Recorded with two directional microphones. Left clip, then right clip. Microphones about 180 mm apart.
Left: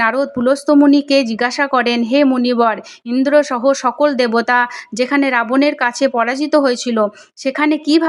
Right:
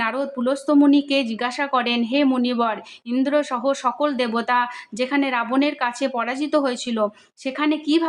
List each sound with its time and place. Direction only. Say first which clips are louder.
0.0 s speech: left 8 dB; 35° left (ahead or behind)